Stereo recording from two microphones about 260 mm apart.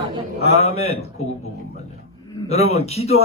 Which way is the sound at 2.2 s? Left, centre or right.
Left.